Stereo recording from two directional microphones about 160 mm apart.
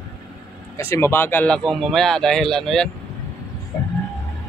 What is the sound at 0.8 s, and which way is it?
Speech, 15° left (ahead or behind).